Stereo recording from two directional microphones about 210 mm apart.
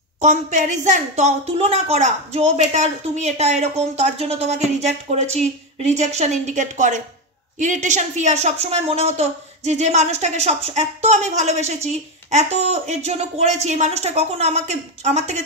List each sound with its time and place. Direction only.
0.2 s a woman's voice: 35° right (ahead or behind)